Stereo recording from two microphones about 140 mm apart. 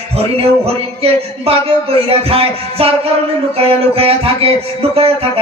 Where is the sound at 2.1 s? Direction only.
45° right (ahead or behind).